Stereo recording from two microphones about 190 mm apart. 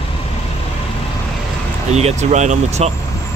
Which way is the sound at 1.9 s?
35° right (ahead or behind).